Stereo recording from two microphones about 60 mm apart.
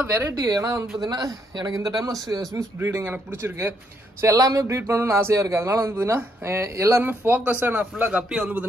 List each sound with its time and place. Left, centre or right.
0.0 s speech: right
0.4 s speech: right
0.9 s a man's voice: right
2.5 s speech: right
4.2 s speech: right
4.6 s speech: right
7.0 s a man's voice: right